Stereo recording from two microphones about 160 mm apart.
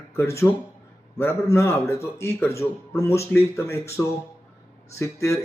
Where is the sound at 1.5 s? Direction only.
15° left (ahead or behind).